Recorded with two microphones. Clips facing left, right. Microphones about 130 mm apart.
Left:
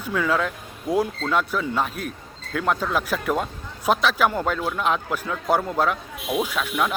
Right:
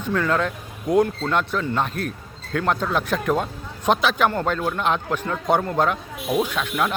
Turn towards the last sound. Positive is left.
turn(degrees=5)  # may be behind; listen again after turning